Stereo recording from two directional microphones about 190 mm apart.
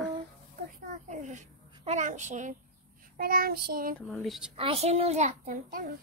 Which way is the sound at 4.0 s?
10° left (ahead or behind).